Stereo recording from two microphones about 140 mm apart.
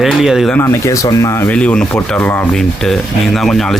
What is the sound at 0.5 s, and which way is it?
Speech, 20° left (ahead or behind).